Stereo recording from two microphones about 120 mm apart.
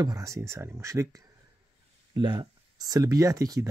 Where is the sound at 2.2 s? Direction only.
35° right (ahead or behind).